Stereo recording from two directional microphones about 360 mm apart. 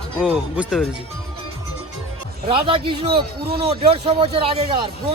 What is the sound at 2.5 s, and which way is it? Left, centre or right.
A man's voice, centre.